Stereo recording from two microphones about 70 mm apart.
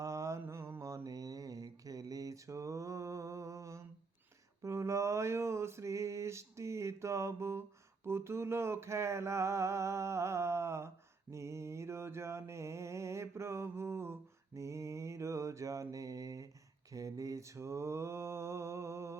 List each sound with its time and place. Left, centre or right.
0.0 s mantra: right
4.6 s a sound: right
16.9 s mantra: right